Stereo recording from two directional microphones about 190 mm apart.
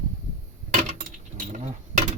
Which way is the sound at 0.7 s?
40° right (ahead or behind).